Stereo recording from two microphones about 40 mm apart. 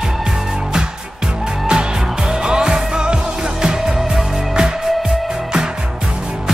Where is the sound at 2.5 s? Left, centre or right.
Centre.